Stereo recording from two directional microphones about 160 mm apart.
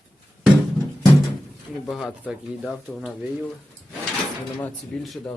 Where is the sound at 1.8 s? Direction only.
Centre (ahead or behind).